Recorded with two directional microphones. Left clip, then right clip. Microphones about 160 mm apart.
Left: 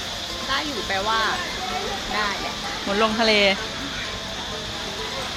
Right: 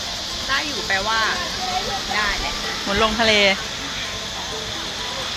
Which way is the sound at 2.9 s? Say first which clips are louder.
Right 2 dB; 5° right (ahead or behind).